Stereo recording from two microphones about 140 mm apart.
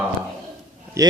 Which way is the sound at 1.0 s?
25° right (ahead or behind).